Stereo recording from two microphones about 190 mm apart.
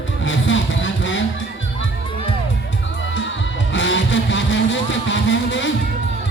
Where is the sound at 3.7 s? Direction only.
75° left (ahead or behind).